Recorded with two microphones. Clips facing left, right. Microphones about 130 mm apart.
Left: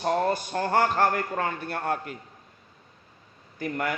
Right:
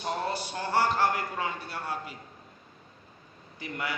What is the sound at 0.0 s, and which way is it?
A man's voice, 50° left (ahead or behind).